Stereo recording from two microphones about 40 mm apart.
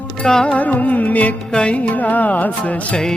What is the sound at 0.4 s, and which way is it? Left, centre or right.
Music, left.